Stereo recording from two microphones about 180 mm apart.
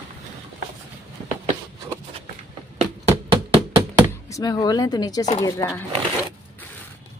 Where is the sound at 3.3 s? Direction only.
30° right (ahead or behind).